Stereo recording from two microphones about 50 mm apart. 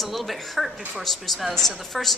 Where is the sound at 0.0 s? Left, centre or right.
Centre.